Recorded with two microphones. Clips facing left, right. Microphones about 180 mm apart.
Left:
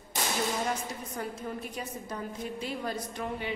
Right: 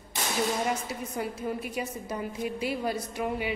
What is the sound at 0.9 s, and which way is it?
A woman's voice, 10° right (ahead or behind).